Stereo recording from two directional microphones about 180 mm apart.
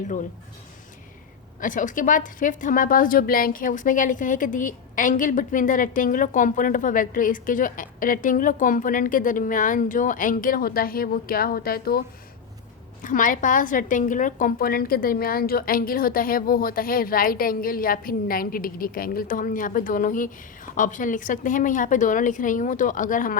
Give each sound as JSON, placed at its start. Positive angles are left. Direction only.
{"t": 1.6, "sound": "a woman's voice", "side_deg": 45}